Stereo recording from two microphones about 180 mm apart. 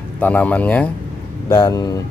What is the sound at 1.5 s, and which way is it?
Speech, 20° left (ahead or behind).